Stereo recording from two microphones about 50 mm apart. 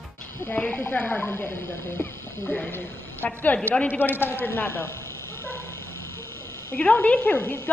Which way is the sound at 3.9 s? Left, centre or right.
Left.